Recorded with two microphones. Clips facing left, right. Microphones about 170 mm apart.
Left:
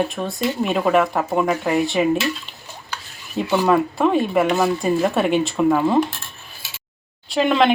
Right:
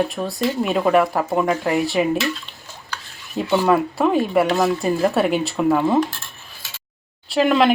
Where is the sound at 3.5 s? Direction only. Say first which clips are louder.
Even; centre (ahead or behind).